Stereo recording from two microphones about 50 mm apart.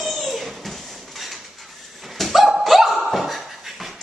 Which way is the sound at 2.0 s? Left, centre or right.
Centre.